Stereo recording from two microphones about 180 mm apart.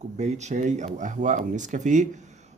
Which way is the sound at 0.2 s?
40° right (ahead or behind).